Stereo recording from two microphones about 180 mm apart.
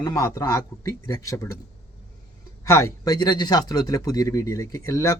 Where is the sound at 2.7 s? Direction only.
15° left (ahead or behind).